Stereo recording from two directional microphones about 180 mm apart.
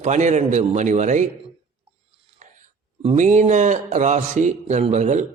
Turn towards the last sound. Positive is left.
turn(degrees=-40)  # may be behind; listen again after turning